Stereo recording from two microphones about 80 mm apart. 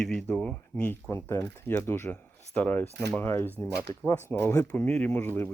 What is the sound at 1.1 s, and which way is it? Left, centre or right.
Speech, left.